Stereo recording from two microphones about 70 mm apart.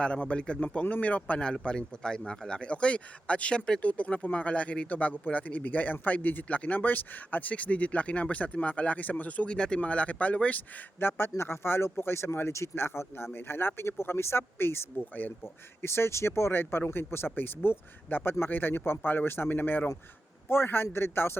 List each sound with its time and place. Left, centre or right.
0.0 s a man's voice: centre
11.0 s a man's voice: left
15.8 s speech: left